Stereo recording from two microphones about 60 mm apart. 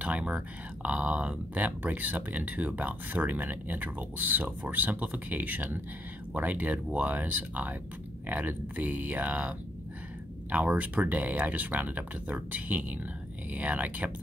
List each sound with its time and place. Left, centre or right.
0.0 s speech: right